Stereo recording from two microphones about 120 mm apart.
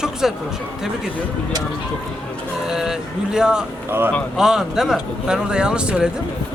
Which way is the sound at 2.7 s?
5° right (ahead or behind).